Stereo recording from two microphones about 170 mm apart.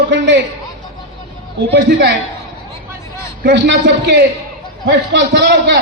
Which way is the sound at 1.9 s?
90° right.